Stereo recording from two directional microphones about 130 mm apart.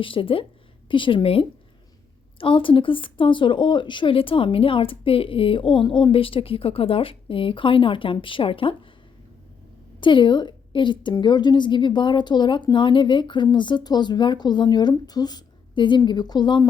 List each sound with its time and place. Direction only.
0.0 s a woman's voice: 40° left (ahead or behind)
10.0 s a woman's voice: 40° left (ahead or behind)